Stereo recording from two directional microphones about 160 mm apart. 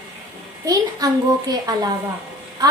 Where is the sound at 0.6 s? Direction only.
20° right (ahead or behind).